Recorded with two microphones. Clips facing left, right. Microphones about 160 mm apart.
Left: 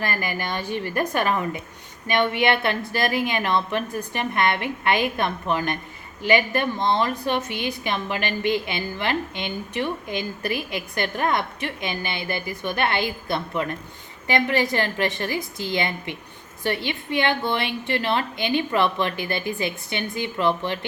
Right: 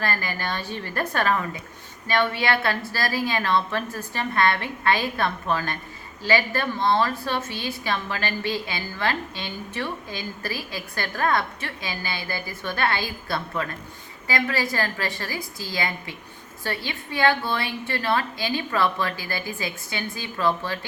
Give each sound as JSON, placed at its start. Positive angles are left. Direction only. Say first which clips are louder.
{"t": 0.0, "sound": "a woman's voice", "louder": "left 1 dB", "side_deg": 15}